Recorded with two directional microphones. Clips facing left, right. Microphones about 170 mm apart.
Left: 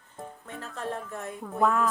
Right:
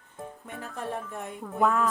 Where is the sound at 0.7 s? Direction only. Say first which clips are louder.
Even; 15° right (ahead or behind).